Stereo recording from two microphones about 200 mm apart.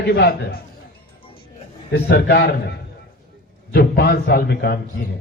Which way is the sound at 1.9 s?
60° left (ahead or behind).